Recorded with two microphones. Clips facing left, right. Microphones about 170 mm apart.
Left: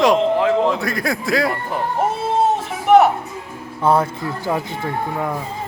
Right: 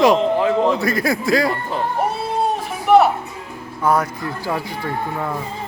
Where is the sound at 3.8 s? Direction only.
25° left (ahead or behind).